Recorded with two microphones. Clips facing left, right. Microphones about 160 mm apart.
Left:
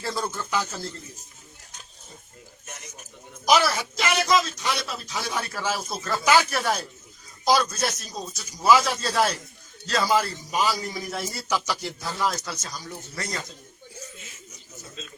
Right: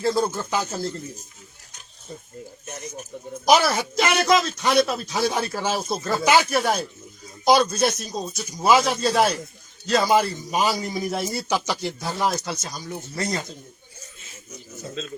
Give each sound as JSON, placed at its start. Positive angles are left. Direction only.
{"t": 0.1, "sound": "a man's voice", "side_deg": -30}
{"t": 3.7, "sound": "speech", "side_deg": -50}
{"t": 5.1, "sound": "a man's voice", "side_deg": -30}